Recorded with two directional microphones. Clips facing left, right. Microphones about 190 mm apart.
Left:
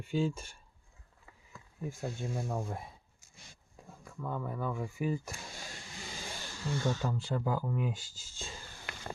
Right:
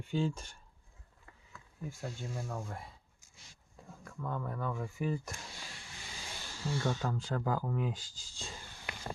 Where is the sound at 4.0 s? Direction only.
10° left (ahead or behind).